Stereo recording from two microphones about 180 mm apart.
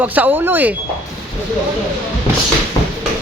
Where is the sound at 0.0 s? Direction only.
10° right (ahead or behind).